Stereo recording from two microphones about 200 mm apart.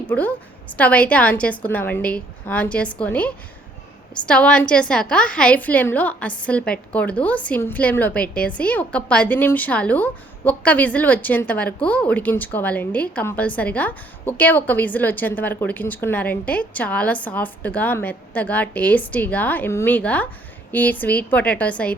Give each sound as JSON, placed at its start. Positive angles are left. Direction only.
{"t": 0.1, "sound": "a woman's voice", "side_deg": 10}